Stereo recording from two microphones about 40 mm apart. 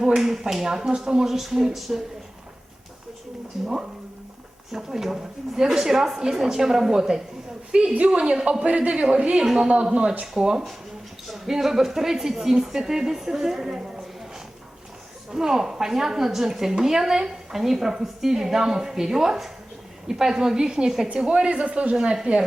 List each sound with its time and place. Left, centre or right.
0.2 s a woman's voice: centre
4.7 s a woman's voice: centre
8.4 s a man's voice: right
9.3 s a woman's voice: centre
9.9 s a man's voice: right
15.3 s a woman's voice: centre; by 21.9 s right
21.9 s a woman's voice: centre